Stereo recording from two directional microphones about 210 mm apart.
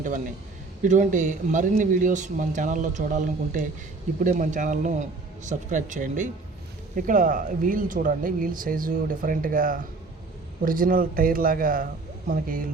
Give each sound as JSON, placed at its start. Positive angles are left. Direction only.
{"t": 0.0, "sound": "a man's voice", "side_deg": -40}